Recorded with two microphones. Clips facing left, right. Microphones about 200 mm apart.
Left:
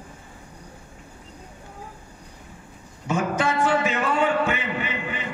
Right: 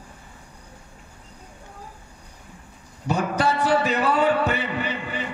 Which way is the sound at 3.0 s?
35° right (ahead or behind).